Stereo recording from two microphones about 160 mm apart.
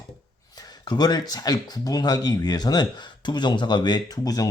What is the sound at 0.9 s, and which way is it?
Speech, 25° left (ahead or behind).